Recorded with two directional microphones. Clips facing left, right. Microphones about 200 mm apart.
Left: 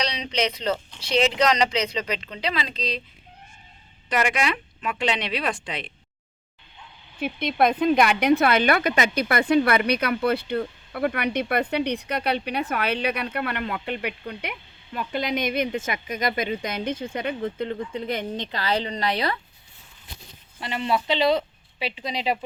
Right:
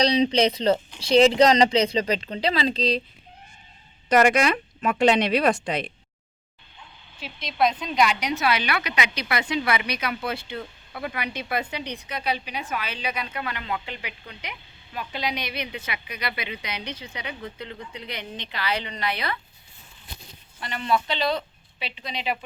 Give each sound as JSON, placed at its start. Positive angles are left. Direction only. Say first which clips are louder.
{"t": 0.0, "sound": "speech", "louder": "right 7 dB", "side_deg": -30}
{"t": 4.1, "sound": "speech", "louder": "right 5 dB", "side_deg": -40}
{"t": 7.2, "sound": "a woman's voice", "louder": "left 3 dB", "side_deg": 55}
{"t": 20.6, "sound": "speech", "louder": "even", "side_deg": 25}